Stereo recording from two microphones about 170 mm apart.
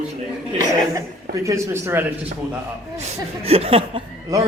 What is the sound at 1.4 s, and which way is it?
Speech, 15° right (ahead or behind).